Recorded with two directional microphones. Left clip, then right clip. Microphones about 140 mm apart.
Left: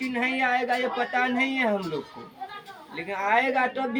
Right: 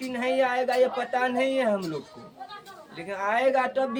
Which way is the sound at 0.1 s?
35° right (ahead or behind).